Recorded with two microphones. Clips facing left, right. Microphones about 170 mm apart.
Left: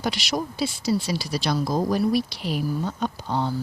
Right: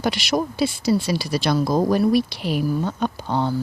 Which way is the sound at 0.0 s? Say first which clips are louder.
Right 5 dB; 60° right (ahead or behind).